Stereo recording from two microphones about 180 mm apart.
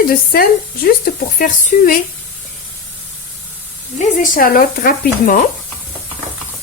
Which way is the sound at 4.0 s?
45° left (ahead or behind).